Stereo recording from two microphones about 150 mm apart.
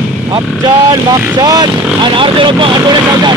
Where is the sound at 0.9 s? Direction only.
25° right (ahead or behind).